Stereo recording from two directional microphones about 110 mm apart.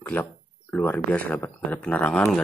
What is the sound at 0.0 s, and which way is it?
Speech, 15° left (ahead or behind).